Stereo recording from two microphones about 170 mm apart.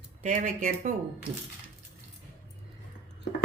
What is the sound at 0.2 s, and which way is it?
Speech, 45° right (ahead or behind).